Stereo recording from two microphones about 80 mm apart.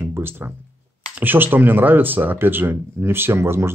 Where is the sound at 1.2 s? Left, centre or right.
Right.